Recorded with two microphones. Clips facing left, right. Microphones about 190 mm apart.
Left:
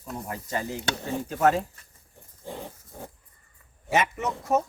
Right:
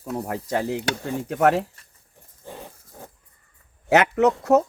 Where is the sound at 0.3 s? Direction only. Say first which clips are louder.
Right 5 dB; 70° right (ahead or behind).